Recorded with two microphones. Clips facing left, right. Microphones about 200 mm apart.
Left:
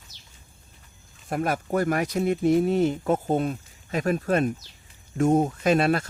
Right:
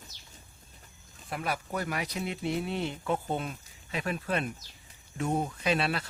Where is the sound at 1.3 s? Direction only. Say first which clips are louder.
Left 8 dB; 45° left (ahead or behind).